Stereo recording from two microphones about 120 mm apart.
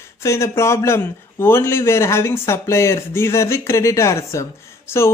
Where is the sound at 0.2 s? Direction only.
25° left (ahead or behind).